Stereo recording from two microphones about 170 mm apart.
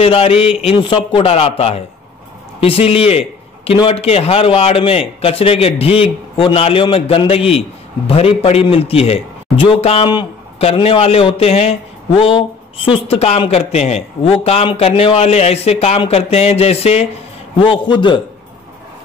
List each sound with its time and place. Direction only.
0.0 s a man's voice: 35° left (ahead or behind)